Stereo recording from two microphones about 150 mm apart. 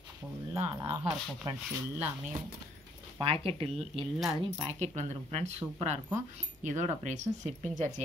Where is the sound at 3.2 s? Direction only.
40° right (ahead or behind).